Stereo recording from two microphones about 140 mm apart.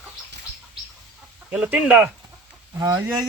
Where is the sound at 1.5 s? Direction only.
10° right (ahead or behind).